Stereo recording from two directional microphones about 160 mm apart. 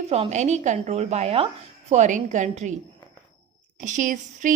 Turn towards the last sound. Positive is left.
turn(degrees=-55)  # may be behind; listen again after turning